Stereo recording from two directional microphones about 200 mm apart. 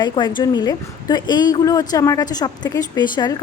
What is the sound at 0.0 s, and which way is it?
A woman's voice, 20° left (ahead or behind).